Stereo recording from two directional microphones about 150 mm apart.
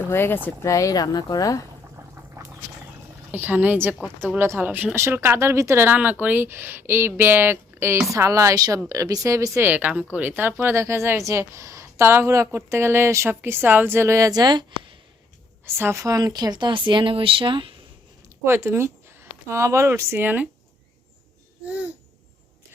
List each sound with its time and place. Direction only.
0.1 s speech: 15° left (ahead or behind)
2.0 s a sound: 20° right (ahead or behind)
3.3 s speech: 10° right (ahead or behind); by 14.9 s 30° right (ahead or behind)
15.6 s speech: 15° right (ahead or behind); by 17.7 s 35° right (ahead or behind)
18.4 s speech: 15° right (ahead or behind)